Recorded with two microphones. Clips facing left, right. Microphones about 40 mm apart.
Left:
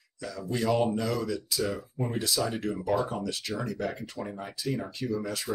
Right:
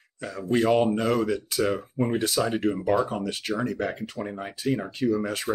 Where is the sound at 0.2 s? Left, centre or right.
Right.